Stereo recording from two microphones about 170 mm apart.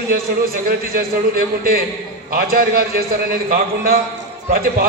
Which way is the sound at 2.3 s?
60° right (ahead or behind).